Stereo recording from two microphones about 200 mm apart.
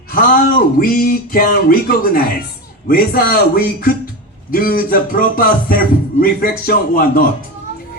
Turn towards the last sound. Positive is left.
turn(degrees=45)  # may be behind; listen again after turning